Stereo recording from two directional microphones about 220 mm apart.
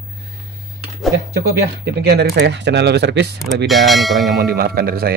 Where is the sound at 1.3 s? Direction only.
45° right (ahead or behind).